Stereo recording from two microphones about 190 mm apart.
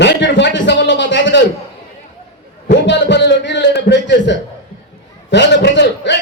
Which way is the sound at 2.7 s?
70° left (ahead or behind).